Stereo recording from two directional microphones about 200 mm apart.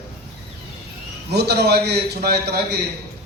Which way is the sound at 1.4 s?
55° right (ahead or behind).